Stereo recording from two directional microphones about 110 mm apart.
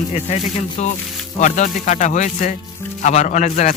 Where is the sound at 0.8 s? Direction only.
90° left.